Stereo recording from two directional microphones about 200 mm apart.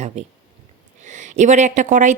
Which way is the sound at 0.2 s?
35° right (ahead or behind).